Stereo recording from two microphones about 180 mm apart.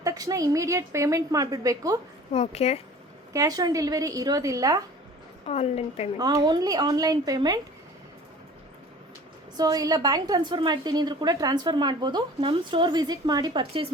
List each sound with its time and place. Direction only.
0.0 s a woman's voice: 20° right (ahead or behind)
2.3 s a woman's voice: 35° left (ahead or behind)
3.3 s a woman's voice: 20° right (ahead or behind)
5.5 s a woman's voice: 35° left (ahead or behind)
6.1 s a woman's voice: 20° right (ahead or behind)
9.6 s a woman's voice: 20° right (ahead or behind)